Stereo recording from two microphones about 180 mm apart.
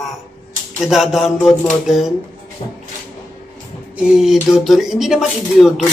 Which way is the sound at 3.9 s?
5° right (ahead or behind).